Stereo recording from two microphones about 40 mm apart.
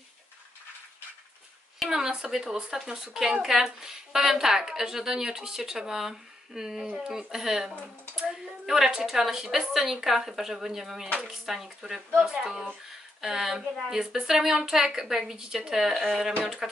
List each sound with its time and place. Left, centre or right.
2.0 s a woman's voice: right
15.9 s speech: centre